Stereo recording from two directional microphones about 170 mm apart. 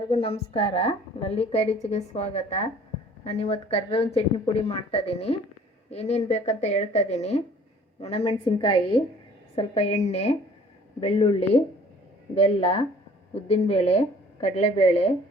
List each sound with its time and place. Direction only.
0.1 s a woman's voice: 35° left (ahead or behind)